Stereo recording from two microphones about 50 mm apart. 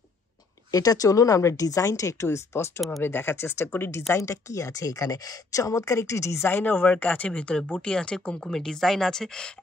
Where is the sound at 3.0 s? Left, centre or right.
Left.